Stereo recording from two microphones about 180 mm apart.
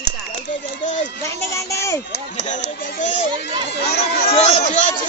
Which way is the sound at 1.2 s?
15° left (ahead or behind).